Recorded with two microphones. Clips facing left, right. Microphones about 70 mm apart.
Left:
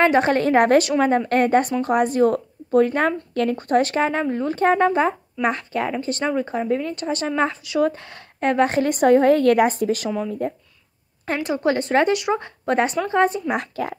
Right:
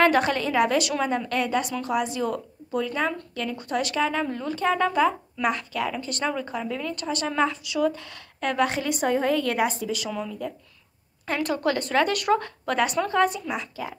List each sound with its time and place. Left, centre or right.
0.0 s speech: left
3.5 s speech: left
11.4 s a woman's voice: left
12.1 s speech: centre
12.6 s a woman's voice: left
13.5 s speech: left